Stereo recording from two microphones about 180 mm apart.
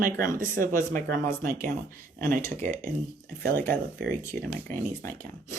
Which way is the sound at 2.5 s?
10° left (ahead or behind).